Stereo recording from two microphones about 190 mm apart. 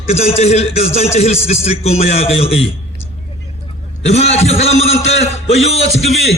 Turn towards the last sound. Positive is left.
turn(degrees=35)  # may be behind; listen again after turning